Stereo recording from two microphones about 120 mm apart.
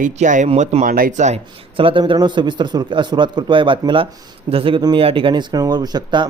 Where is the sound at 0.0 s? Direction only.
90° right.